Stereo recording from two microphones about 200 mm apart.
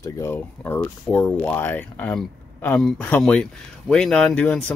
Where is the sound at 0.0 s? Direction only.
15° left (ahead or behind).